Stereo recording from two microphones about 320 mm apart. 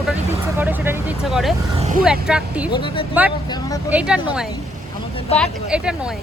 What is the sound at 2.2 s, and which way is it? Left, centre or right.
Speech, centre.